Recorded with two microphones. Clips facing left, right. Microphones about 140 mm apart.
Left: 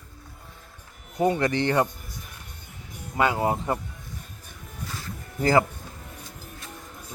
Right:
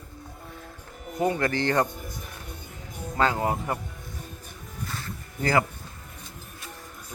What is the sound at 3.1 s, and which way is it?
Speech, 15° left (ahead or behind).